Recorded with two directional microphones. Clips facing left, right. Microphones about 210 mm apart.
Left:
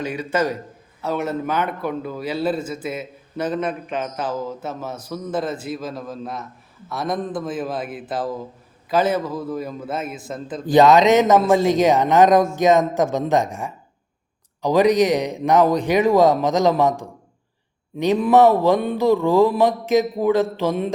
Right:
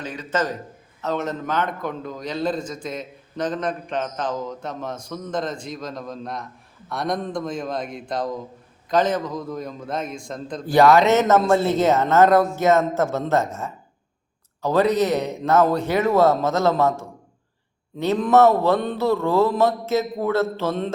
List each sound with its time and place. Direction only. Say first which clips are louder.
0.0 s a man's voice: left 3 dB; 10° left (ahead or behind)
10.7 s a man's voice: left 2 dB; 20° left (ahead or behind)